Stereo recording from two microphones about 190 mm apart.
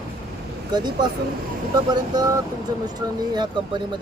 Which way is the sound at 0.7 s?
20° right (ahead or behind).